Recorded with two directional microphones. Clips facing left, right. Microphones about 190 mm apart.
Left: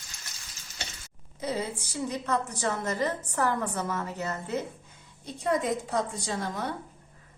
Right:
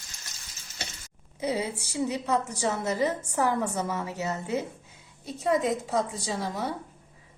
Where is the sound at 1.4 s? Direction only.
10° right (ahead or behind).